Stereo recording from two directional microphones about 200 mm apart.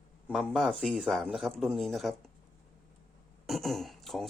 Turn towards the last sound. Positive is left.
turn(degrees=0)  # may be behind; listen again after turning